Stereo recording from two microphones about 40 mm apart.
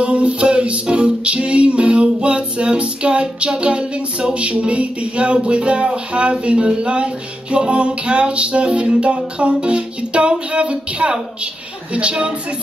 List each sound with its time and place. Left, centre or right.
0.0 s music: right